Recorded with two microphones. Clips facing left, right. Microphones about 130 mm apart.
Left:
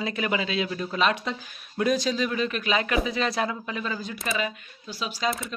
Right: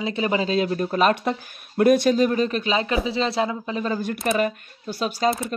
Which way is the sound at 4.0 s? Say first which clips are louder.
Right 7 dB; 55° right (ahead or behind).